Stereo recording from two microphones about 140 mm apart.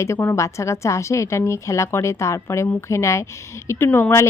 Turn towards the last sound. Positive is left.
turn(degrees=15)  # may be behind; listen again after turning